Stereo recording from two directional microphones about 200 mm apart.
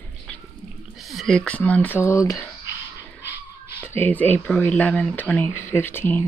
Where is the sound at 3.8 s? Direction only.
10° left (ahead or behind).